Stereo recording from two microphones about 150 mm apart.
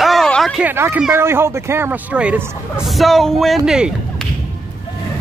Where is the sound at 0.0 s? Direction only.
Centre (ahead or behind).